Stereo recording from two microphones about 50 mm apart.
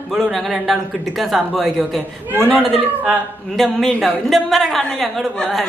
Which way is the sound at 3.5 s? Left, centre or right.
Centre.